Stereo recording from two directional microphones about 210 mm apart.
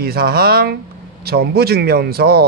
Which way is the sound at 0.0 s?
45° right (ahead or behind).